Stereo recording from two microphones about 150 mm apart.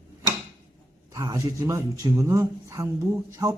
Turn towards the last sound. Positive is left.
turn(degrees=-25)  # may be behind; listen again after turning